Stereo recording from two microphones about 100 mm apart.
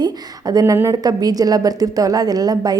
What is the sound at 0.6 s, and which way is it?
A woman's voice, 25° right (ahead or behind).